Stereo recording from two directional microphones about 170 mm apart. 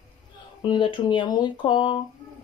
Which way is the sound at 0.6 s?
25° left (ahead or behind).